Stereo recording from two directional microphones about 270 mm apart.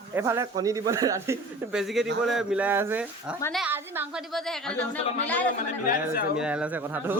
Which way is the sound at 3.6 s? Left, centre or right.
Centre.